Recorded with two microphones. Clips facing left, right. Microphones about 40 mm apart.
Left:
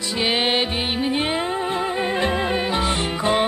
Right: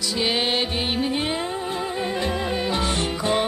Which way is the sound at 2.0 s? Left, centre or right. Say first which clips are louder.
Left 3 dB; left.